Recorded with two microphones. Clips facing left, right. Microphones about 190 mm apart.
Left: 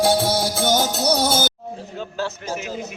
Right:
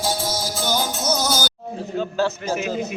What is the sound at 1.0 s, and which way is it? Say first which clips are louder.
Music: left 3 dB; 30° left (ahead or behind).